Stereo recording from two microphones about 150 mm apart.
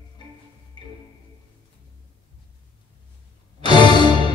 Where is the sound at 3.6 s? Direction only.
30° left (ahead or behind).